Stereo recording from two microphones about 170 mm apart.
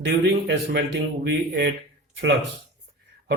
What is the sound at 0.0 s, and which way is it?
Speech, 80° right.